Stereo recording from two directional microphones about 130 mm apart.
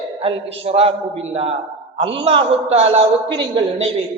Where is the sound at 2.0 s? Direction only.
45° right (ahead or behind).